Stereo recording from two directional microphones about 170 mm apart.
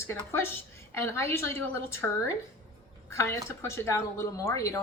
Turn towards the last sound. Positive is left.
turn(degrees=20)  # may be behind; listen again after turning